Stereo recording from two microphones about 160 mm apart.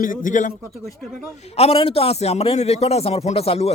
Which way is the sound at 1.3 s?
40° left (ahead or behind).